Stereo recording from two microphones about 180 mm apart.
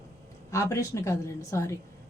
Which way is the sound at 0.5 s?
15° left (ahead or behind).